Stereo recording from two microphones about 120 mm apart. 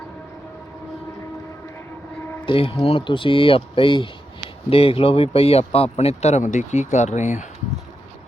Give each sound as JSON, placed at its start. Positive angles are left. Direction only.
{"t": 2.5, "sound": "speech", "side_deg": 45}